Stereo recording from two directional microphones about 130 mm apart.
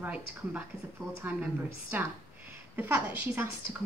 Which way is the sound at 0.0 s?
15° right (ahead or behind).